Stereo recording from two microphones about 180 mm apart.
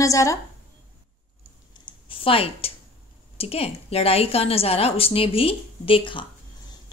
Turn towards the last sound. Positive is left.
turn(degrees=25)  # may be behind; listen again after turning